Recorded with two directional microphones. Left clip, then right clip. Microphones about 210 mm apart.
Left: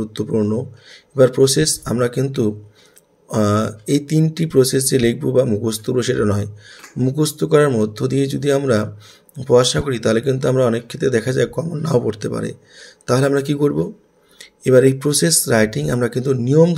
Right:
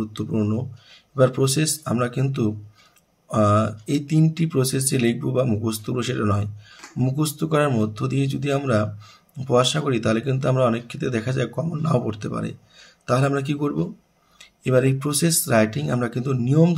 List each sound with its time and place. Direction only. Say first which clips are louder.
0.0 s speech: left 6 dB; 25° left (ahead or behind)